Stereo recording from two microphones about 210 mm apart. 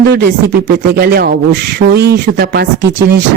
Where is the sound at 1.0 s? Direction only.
50° right (ahead or behind).